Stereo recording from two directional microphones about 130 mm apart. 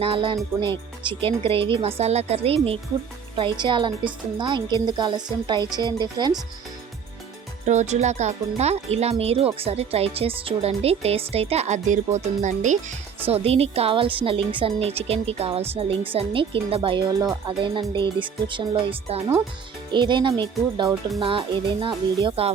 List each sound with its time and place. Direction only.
0.0 s speech: 45° right (ahead or behind)
7.6 s speech: 65° right (ahead or behind)
13.2 s speech: 50° right (ahead or behind)
19.9 s speech: 35° right (ahead or behind)